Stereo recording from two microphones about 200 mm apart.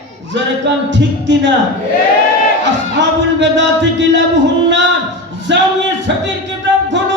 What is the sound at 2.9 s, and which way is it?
Music, 65° right (ahead or behind).